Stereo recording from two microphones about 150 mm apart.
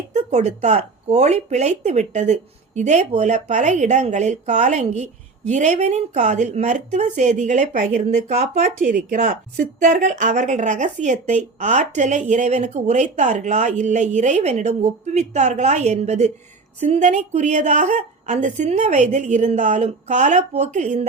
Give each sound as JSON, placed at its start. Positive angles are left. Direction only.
{"t": 0.1, "sound": "a woman's voice", "side_deg": -50}
{"t": 8.6, "sound": "a woman's voice", "side_deg": -65}